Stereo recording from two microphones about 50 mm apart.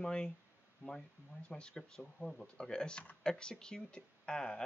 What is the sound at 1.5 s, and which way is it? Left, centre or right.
Speech, centre.